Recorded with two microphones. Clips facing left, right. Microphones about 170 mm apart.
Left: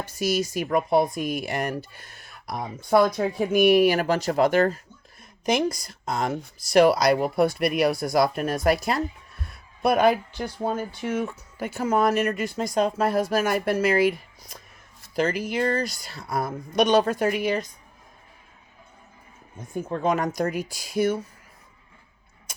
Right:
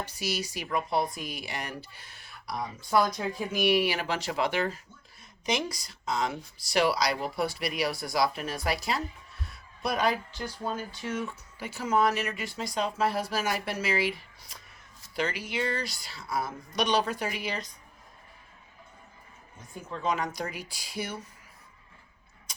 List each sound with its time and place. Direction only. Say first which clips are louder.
0.0 s speech: left 8 dB; 50° left (ahead or behind)
19.5 s speech: left 10 dB; 50° left (ahead or behind)